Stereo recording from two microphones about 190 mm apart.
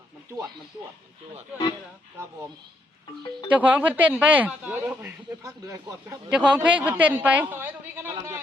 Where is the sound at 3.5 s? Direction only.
10° right (ahead or behind).